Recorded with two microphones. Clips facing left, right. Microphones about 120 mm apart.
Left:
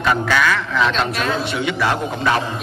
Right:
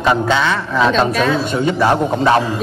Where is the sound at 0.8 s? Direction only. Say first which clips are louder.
Right 8 dB; 40° right (ahead or behind).